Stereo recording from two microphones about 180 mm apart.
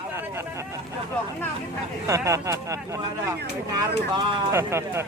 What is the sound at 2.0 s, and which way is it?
Speech, 15° right (ahead or behind).